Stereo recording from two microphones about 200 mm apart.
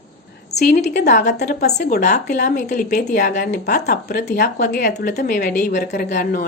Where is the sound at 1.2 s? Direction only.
55° left (ahead or behind).